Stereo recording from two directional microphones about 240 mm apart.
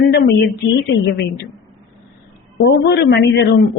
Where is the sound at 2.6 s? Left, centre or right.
Left.